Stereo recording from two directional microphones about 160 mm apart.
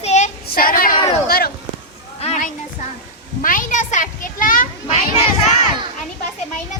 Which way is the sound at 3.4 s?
55° left (ahead or behind).